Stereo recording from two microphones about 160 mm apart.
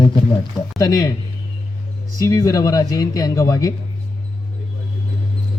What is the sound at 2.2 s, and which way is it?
Speech, 20° left (ahead or behind).